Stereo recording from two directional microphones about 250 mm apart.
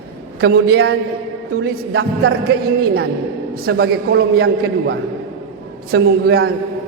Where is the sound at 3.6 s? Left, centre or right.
Right.